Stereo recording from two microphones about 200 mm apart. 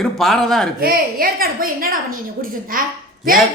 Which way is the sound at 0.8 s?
50° right (ahead or behind).